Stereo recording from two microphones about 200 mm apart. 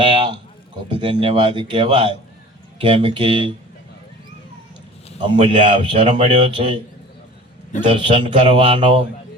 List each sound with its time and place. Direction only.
0.0 s a man's voice: 25° right (ahead or behind)
5.2 s a man's voice: 25° right (ahead or behind)
7.9 s a man's voice: 25° right (ahead or behind)